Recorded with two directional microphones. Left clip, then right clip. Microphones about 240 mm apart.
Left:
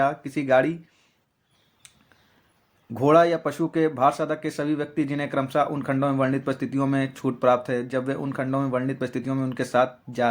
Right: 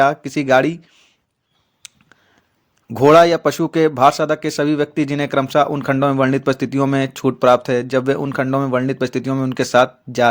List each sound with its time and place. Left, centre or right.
0.0 s speech: right
1.8 s a sound: right
2.9 s speech: right